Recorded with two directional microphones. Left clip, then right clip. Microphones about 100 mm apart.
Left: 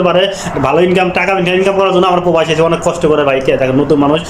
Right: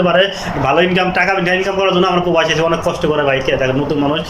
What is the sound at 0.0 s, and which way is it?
A man's voice, 35° left (ahead or behind).